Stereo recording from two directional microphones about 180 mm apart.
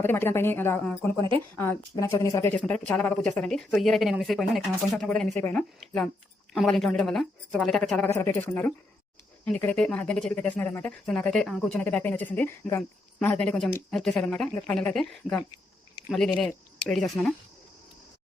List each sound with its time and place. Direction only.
0.0 s speech: 10° left (ahead or behind)
8.1 s speech: 15° left (ahead or behind)